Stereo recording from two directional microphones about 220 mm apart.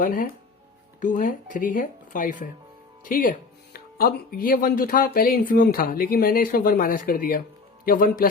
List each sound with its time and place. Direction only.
0.0 s speech: 40° left (ahead or behind)